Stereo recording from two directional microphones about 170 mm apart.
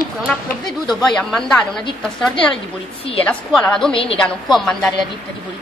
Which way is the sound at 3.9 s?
35° left (ahead or behind).